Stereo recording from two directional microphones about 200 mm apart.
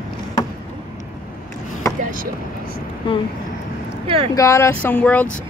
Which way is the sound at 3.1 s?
25° left (ahead or behind).